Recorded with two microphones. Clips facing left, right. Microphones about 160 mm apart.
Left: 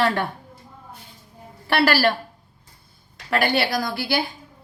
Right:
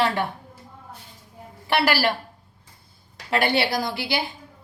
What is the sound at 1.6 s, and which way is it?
Speech, 15° right (ahead or behind).